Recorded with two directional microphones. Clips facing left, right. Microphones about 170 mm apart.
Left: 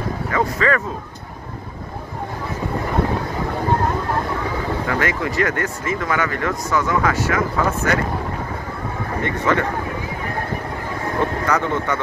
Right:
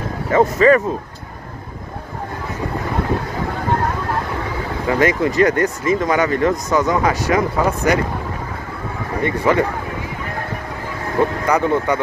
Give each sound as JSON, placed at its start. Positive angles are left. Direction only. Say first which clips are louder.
{"t": 0.3, "sound": "speech", "louder": "right 8 dB", "side_deg": -20}
{"t": 4.8, "sound": "speech", "louder": "right 10 dB", "side_deg": -20}
{"t": 9.2, "sound": "speech", "louder": "right 4 dB", "side_deg": -10}
{"t": 11.4, "sound": "speech", "louder": "right 4 dB", "side_deg": -15}